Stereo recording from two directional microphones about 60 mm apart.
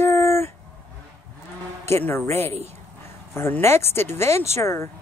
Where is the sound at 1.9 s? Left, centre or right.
Left.